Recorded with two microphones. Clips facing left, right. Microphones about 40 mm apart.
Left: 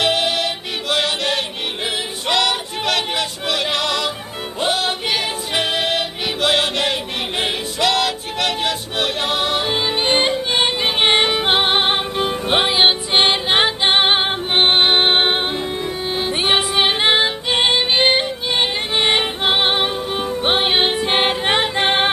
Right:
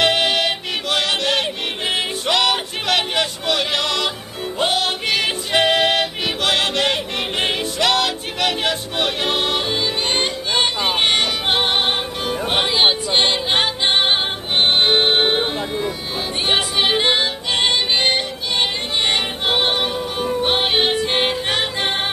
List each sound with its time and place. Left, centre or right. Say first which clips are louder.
0.0 s music: right 1 dB; centre
10.0 s music: left 4 dB; left
16.4 s music: left 1 dB; centre; by 22.1 s left